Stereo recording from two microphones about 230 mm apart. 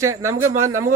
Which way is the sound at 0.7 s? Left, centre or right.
Right.